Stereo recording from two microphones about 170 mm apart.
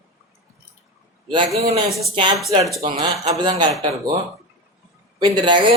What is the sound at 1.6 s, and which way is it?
Speech, 35° right (ahead or behind).